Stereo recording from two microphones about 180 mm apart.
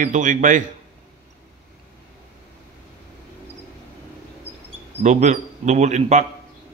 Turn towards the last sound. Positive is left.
turn(degrees=-40)  # may be behind; listen again after turning